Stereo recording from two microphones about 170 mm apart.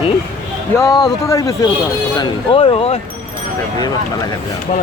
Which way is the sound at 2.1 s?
30° left (ahead or behind).